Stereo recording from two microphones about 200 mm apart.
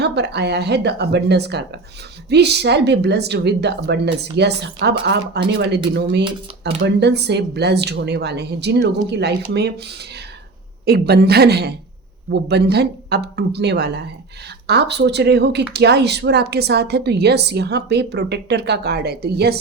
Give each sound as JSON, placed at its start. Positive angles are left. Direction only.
{"t": 0.0, "sound": "a woman's voice", "side_deg": -55}